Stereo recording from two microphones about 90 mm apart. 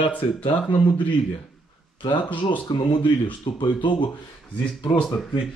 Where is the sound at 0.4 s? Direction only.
65° left (ahead or behind).